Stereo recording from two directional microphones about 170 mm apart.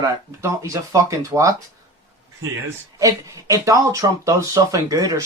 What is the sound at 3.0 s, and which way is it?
Speech, 20° right (ahead or behind).